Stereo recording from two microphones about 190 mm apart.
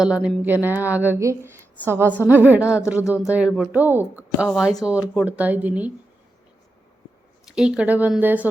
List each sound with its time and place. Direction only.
0.0 s a woman's voice: 5° right (ahead or behind)
3.0 s speech: 15° left (ahead or behind)
3.3 s a woman's voice: centre (ahead or behind)
7.4 s a woman's voice: 5° right (ahead or behind)